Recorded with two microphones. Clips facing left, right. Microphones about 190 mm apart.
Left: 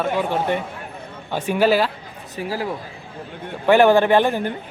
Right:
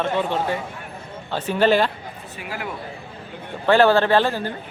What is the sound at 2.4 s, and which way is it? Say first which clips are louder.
Speech: left 7 dB; 35° left (ahead or behind).